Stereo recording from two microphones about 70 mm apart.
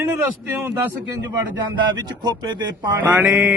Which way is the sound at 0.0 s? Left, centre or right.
Right.